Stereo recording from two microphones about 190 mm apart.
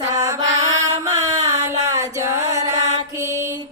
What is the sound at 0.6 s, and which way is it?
Mantra, 20° right (ahead or behind).